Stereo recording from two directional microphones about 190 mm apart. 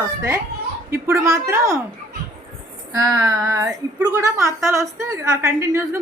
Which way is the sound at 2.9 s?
20° right (ahead or behind).